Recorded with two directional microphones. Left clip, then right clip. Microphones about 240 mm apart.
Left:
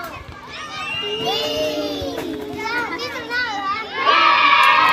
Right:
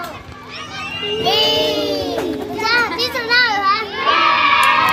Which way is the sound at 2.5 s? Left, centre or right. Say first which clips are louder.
Right 8 dB; right.